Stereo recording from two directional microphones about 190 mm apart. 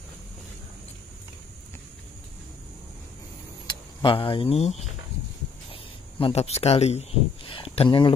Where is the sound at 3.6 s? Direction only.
25° left (ahead or behind).